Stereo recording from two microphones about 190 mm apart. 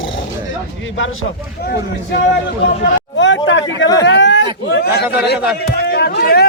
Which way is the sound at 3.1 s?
70° left (ahead or behind).